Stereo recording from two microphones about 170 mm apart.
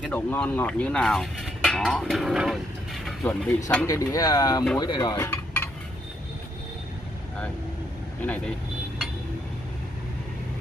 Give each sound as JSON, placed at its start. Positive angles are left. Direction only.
{"t": 0.1, "sound": "speech", "side_deg": 10}
{"t": 3.3, "sound": "speech", "side_deg": 10}
{"t": 5.1, "sound": "cutlery", "side_deg": 15}
{"t": 8.2, "sound": "speech", "side_deg": 10}